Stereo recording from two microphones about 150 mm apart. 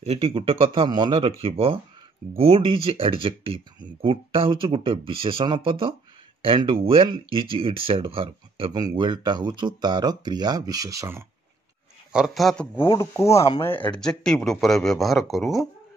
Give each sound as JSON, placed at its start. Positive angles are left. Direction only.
{"t": 0.0, "sound": "speech", "side_deg": -40}
{"t": 12.1, "sound": "speech", "side_deg": 0}
{"t": 12.7, "sound": "speech", "side_deg": 15}